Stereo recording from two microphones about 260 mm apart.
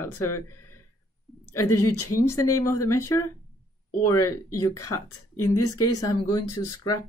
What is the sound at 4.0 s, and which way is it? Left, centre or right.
Speech, centre.